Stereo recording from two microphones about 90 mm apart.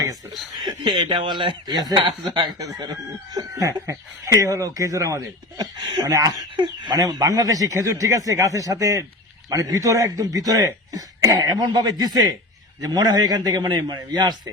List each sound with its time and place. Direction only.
0.9 s speech: 55° right (ahead or behind)